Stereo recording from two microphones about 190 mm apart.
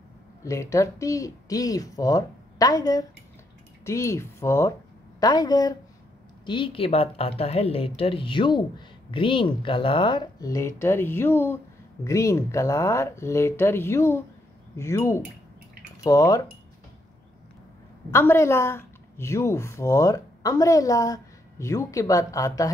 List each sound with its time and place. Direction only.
0.4 s speech: 15° left (ahead or behind)
18.1 s speech: 15° left (ahead or behind)